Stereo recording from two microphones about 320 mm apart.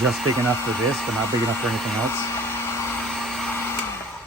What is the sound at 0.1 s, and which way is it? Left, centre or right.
Speech, centre.